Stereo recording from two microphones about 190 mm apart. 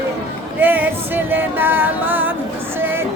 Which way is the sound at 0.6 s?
10° right (ahead or behind).